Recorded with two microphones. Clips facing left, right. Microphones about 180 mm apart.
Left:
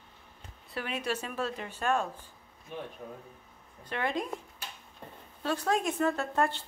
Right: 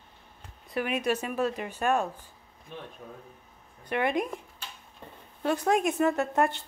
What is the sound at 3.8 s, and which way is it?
Speech, 15° right (ahead or behind).